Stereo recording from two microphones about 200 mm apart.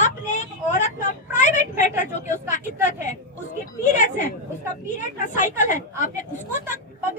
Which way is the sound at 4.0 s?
40° left (ahead or behind).